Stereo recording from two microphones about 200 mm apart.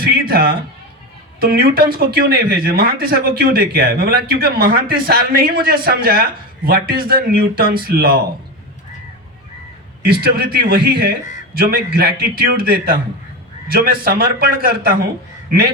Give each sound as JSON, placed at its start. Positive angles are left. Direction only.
{"t": 0.0, "sound": "a sound", "side_deg": -50}
{"t": 1.4, "sound": "speech", "side_deg": -50}
{"t": 10.0, "sound": "speech", "side_deg": -50}